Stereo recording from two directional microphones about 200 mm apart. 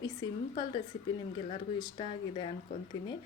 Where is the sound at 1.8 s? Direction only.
25° left (ahead or behind).